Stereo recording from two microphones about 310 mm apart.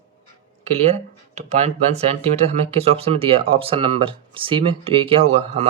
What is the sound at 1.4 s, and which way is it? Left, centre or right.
Speech, right.